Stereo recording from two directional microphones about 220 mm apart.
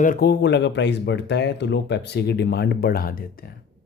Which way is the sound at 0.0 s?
40° left (ahead or behind).